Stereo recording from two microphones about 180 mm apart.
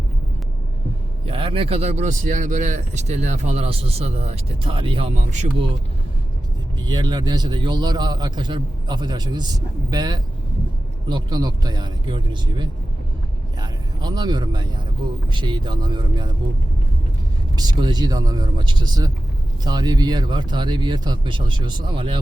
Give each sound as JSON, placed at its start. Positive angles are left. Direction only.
{"t": 1.2, "sound": "speech", "side_deg": -30}
{"t": 6.7, "sound": "a man's voice", "side_deg": -25}
{"t": 17.6, "sound": "a man's voice", "side_deg": -25}